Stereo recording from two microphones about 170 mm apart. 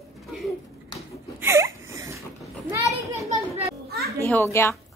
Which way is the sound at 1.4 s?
15° right (ahead or behind).